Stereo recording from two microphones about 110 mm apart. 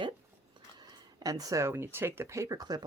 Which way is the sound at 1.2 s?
35° right (ahead or behind).